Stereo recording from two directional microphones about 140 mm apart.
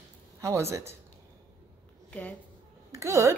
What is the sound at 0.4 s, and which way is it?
Speech, 20° right (ahead or behind).